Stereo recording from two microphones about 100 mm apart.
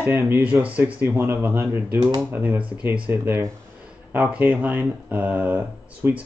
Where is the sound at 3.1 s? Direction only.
30° right (ahead or behind).